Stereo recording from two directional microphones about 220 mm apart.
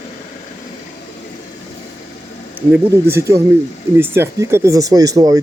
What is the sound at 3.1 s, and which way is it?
Speech, 15° right (ahead or behind).